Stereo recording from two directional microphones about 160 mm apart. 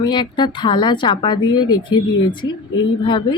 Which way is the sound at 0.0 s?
30° left (ahead or behind).